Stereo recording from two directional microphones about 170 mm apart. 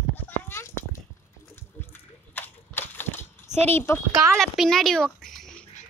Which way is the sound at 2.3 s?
10° left (ahead or behind).